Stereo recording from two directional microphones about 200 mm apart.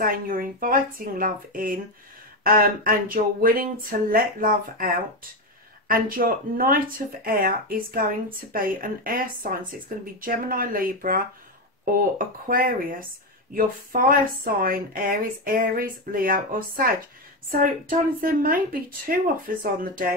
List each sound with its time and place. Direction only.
0.0 s a woman's voice: 45° right (ahead or behind)